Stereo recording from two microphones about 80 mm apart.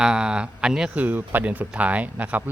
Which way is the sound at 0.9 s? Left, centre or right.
Right.